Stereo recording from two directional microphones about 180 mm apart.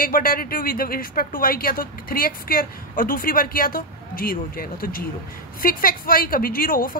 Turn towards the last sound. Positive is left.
turn(degrees=50)  # may be behind; listen again after turning